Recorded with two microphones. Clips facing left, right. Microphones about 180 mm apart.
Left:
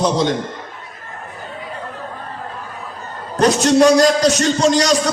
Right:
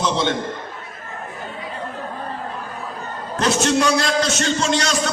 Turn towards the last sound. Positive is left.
turn(degrees=35)  # may be behind; listen again after turning